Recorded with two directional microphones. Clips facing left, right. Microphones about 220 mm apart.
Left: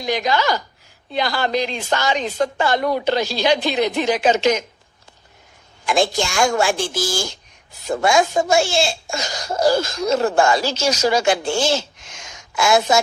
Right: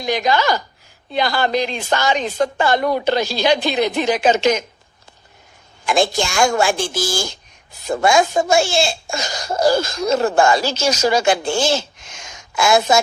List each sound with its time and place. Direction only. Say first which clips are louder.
0.0 s speech: right 2 dB; 50° right (ahead or behind)
5.8 s speech: right 1 dB; 45° right (ahead or behind)